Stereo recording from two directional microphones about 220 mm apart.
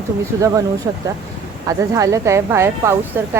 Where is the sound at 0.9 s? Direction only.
15° right (ahead or behind).